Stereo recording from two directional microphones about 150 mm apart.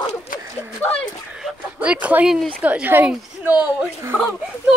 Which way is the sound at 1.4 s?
10° right (ahead or behind).